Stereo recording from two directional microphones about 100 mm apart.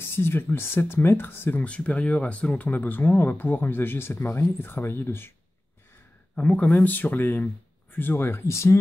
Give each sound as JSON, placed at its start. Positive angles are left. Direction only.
{"t": 0.1, "sound": "speech", "side_deg": 25}
{"t": 6.3, "sound": "speech", "side_deg": 10}